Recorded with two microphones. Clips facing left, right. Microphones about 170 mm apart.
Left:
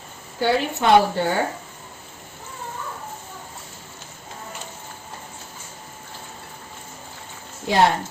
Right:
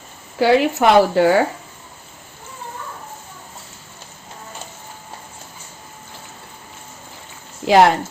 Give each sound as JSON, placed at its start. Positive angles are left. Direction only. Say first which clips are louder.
{"t": 0.3, "sound": "a woman's voice", "louder": "right 7 dB", "side_deg": -90}
{"t": 7.7, "sound": "speech", "louder": "right 6 dB", "side_deg": -90}